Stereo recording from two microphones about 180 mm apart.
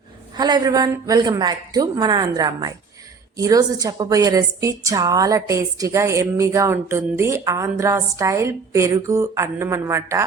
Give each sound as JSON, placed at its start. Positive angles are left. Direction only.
{"t": 0.3, "sound": "a woman's voice", "side_deg": -25}